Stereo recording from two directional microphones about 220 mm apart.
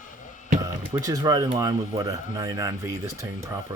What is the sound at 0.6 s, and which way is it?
A man's voice, 15° right (ahead or behind).